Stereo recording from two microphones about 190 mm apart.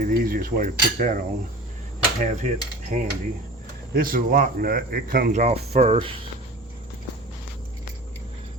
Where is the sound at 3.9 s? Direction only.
50° right (ahead or behind).